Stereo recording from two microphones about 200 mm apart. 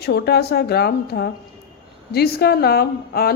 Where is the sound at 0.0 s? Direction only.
55° left (ahead or behind).